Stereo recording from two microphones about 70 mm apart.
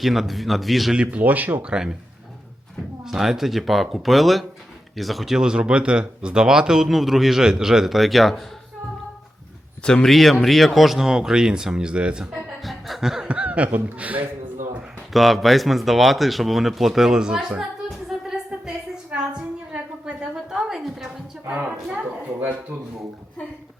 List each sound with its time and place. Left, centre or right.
0.0 s speech: centre
0.9 s speech: centre
1.6 s speech: centre
3.0 s speech: centre
9.8 s speech: centre
12.6 s chuckle: centre
13.2 s speech: centre
15.1 s speech: centre
17.6 s music: centre
19.1 s a sound: centre
21.5 s a woman's voice: centre